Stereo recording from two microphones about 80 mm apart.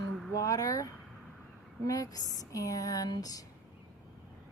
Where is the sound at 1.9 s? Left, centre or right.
Left.